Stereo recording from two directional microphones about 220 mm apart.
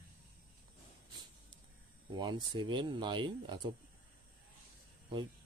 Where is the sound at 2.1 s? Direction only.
20° right (ahead or behind).